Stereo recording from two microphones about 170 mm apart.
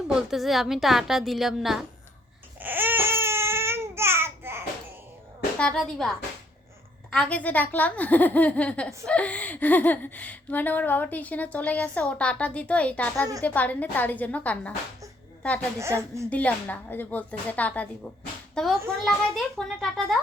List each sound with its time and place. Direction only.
0.1 s a woman's voice: 5° right (ahead or behind)
2.6 s babbling: 10° right (ahead or behind)
5.5 s a woman's voice: 5° left (ahead or behind)
15.8 s speech: 15° right (ahead or behind)
16.3 s a woman's voice: 10° left (ahead or behind)